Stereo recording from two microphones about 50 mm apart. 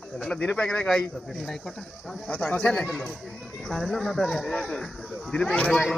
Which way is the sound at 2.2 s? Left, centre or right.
Centre.